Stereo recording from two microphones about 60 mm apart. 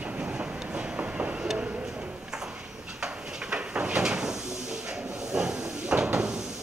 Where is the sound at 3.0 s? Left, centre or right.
Centre.